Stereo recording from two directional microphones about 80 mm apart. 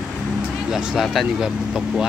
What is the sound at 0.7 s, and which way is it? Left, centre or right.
Speech, centre.